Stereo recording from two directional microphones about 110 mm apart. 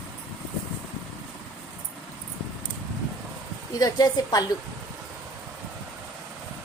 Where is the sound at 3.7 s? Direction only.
35° left (ahead or behind).